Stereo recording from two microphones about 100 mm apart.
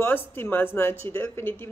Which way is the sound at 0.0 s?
20° left (ahead or behind).